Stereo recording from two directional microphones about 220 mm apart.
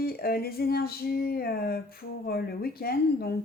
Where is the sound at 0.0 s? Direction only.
45° left (ahead or behind).